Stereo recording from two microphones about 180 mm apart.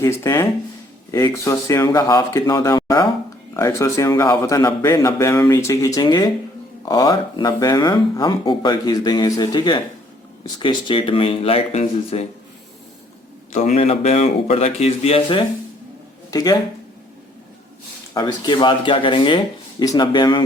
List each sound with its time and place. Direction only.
0.0 s a man's voice: 15° left (ahead or behind); by 12.2 s 35° left (ahead or behind)
13.5 s speech: 40° left (ahead or behind)
16.3 s speech: 20° left (ahead or behind)
18.1 s speech: 25° left (ahead or behind)